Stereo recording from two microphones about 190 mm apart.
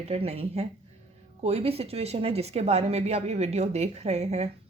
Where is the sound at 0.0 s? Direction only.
35° right (ahead or behind).